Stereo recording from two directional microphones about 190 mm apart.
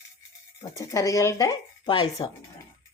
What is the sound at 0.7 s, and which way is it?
Speech, 15° left (ahead or behind).